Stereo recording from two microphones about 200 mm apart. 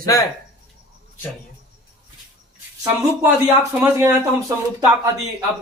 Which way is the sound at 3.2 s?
15° right (ahead or behind).